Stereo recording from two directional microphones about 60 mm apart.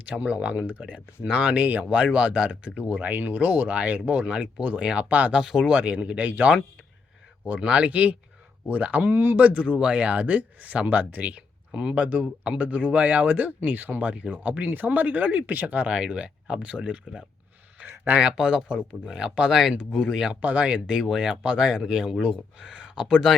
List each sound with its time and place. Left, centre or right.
0.2 s speech: right
5.4 s speech: centre
17.8 s a sound: right
18.2 s speech: centre
20.3 s speech: right